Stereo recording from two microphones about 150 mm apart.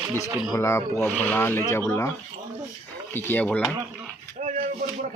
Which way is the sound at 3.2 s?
15° left (ahead or behind).